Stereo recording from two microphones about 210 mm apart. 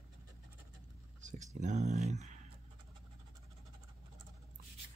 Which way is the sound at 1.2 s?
35° right (ahead or behind).